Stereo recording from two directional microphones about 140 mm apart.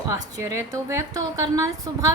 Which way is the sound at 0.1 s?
25° right (ahead or behind).